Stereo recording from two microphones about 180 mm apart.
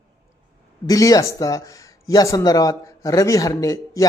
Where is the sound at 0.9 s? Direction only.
20° left (ahead or behind).